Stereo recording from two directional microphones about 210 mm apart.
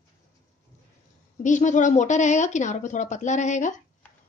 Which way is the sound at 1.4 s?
35° left (ahead or behind).